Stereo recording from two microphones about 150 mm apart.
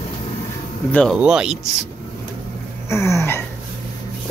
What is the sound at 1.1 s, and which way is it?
Speech, 5° right (ahead or behind).